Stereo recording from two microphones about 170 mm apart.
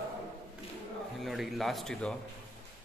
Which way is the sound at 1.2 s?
Centre (ahead or behind).